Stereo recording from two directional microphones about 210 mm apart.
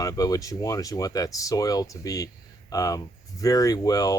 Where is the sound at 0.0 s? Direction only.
15° left (ahead or behind).